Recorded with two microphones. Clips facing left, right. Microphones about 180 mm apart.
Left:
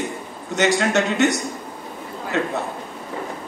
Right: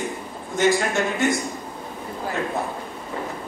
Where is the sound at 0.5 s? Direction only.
75° left (ahead or behind).